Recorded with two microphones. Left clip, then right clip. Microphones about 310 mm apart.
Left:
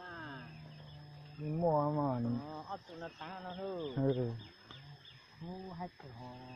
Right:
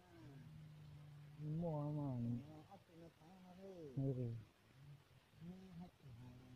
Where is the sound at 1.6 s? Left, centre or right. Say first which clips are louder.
Left 16 dB; centre.